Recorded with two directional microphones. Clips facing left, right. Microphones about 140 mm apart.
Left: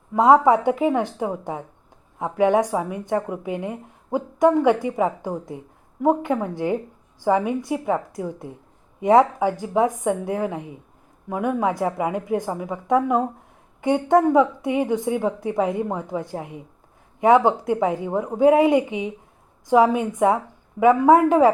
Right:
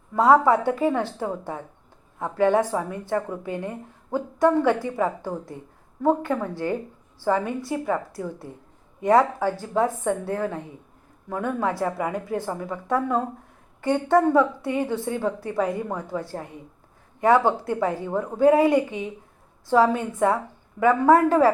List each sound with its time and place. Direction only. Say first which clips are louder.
0.2 s a woman's voice: left 2 dB; 20° left (ahead or behind)